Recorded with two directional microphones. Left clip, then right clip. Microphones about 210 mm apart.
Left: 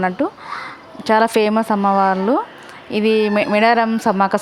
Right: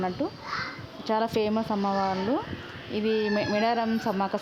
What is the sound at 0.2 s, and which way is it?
Speech, 15° left (ahead or behind).